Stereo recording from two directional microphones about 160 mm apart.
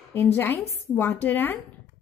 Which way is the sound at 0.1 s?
10° left (ahead or behind).